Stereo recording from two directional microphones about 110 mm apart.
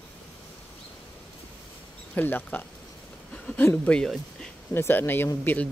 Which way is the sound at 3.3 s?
10° left (ahead or behind).